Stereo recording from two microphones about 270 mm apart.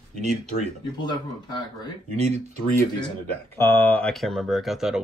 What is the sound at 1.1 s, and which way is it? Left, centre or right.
Speech, centre.